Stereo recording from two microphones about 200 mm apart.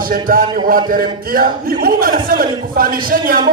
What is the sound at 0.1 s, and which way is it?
A man's voice, 45° right (ahead or behind).